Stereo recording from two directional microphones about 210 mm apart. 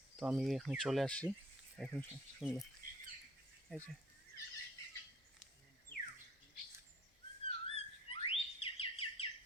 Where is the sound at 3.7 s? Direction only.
5° left (ahead or behind).